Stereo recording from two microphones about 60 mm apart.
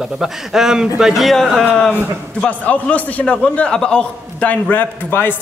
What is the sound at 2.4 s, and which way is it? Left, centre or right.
A man's voice, left.